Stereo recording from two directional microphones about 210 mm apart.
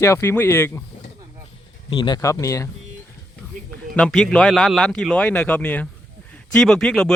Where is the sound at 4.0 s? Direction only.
5° left (ahead or behind).